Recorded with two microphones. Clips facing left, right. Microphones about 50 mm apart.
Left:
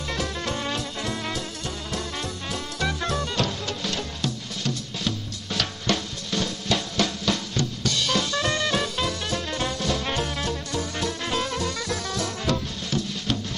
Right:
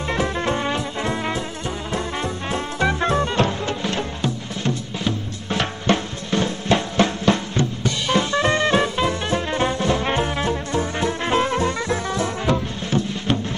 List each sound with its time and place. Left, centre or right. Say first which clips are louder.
0.1 s music: right 7 dB; right